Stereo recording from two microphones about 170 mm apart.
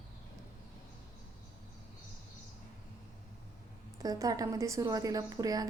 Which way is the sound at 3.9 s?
20° right (ahead or behind).